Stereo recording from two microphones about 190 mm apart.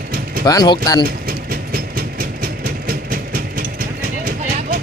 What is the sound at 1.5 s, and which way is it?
Train, 50° right (ahead or behind).